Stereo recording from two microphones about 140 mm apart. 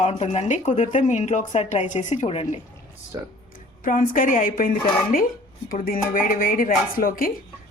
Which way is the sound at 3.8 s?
80° left.